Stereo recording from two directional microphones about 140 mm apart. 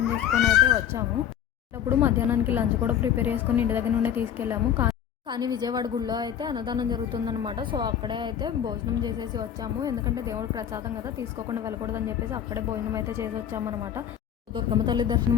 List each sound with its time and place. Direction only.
0.4 s a woman's voice: 20° right (ahead or behind)
5.3 s speech: 30° right (ahead or behind)
14.5 s speech: 35° right (ahead or behind)